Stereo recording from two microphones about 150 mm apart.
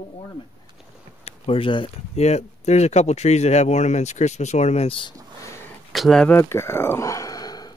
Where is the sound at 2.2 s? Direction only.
45° left (ahead or behind).